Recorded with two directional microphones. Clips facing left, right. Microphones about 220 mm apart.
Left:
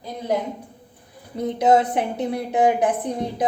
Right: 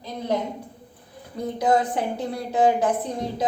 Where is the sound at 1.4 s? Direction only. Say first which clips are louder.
Left 4 dB; 20° left (ahead or behind).